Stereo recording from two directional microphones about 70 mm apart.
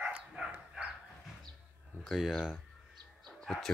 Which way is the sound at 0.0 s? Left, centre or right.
Right.